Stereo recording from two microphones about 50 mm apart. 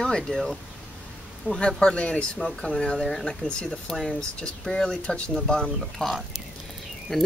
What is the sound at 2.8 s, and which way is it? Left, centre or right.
Speech, centre.